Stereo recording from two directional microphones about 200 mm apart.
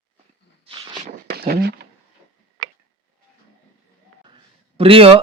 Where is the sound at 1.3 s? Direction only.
50° right (ahead or behind).